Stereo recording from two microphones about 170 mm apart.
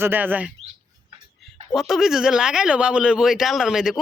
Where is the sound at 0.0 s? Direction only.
10° right (ahead or behind).